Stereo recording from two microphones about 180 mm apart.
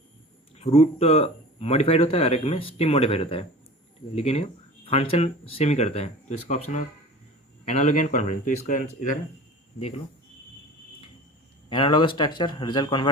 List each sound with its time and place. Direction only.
0.5 s speech: 35° left (ahead or behind)
11.7 s speech: 25° left (ahead or behind)